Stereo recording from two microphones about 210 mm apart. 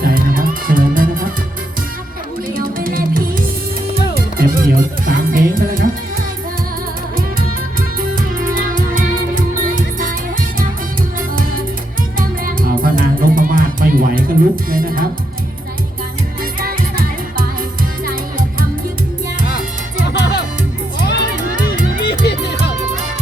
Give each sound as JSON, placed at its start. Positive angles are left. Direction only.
{"t": 0.0, "sound": "music", "side_deg": -40}
{"t": 2.7, "sound": "music", "side_deg": -45}
{"t": 7.8, "sound": "music", "side_deg": -40}
{"t": 12.8, "sound": "music", "side_deg": -40}
{"t": 20.1, "sound": "music", "side_deg": 55}
{"t": 22.0, "sound": "music", "side_deg": 50}